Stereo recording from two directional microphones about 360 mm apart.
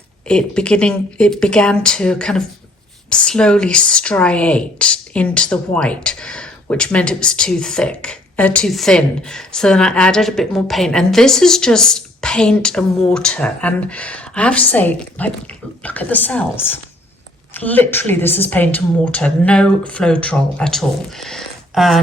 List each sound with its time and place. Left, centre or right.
0.3 s speech: centre